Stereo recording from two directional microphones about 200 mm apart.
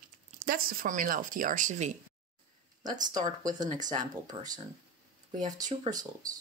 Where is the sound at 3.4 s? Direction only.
20° right (ahead or behind).